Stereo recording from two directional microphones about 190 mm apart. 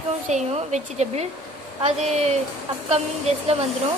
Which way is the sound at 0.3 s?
35° right (ahead or behind).